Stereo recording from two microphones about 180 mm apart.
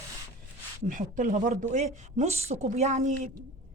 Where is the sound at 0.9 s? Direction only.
45° right (ahead or behind).